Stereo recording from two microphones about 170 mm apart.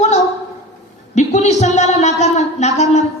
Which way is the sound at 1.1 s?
45° left (ahead or behind).